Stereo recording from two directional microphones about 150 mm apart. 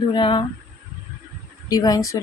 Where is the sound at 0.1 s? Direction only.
35° left (ahead or behind).